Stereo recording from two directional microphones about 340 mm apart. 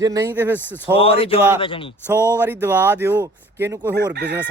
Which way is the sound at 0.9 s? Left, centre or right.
Centre.